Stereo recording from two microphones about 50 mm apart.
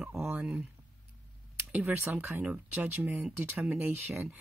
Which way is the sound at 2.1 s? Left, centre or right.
Right.